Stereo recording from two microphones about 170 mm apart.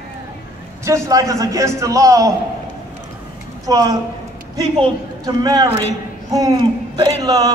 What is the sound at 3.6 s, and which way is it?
Speech, 20° right (ahead or behind).